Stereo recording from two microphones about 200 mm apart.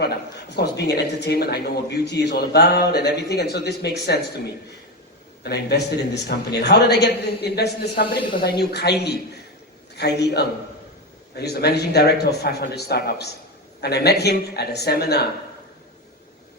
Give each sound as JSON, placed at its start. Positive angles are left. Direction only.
{"t": 0.0, "sound": "speech", "side_deg": 55}
{"t": 5.4, "sound": "a man's voice", "side_deg": 55}